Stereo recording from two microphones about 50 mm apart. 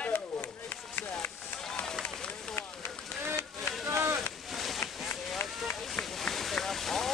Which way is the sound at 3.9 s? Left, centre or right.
Right.